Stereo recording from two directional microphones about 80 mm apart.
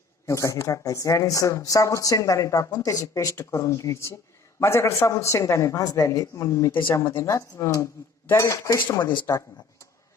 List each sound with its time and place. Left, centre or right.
0.3 s a man's voice: left